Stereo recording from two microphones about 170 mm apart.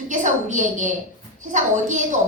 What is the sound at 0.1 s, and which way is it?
A woman's voice, 45° right (ahead or behind).